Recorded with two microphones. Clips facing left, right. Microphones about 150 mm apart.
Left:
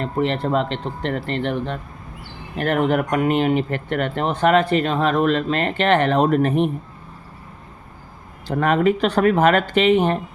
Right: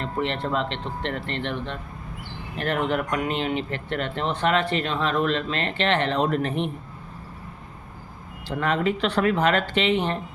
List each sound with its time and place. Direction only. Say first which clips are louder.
0.0 s speech: left 5 dB; 40° left (ahead or behind)
8.4 s speech: left 6 dB; 45° left (ahead or behind)